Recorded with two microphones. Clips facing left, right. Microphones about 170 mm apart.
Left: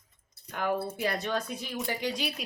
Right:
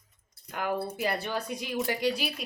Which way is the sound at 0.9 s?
10° right (ahead or behind).